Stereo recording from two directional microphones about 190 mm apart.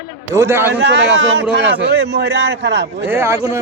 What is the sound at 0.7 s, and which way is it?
A man's voice, 70° right (ahead or behind).